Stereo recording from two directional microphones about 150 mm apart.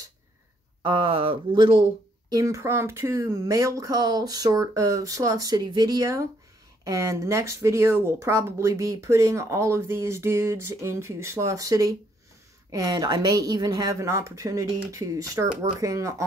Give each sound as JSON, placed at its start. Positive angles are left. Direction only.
{"t": 0.8, "sound": "speech", "side_deg": -35}